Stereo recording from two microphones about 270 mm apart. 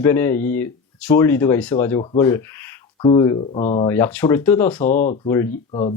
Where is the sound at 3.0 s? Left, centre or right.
Centre.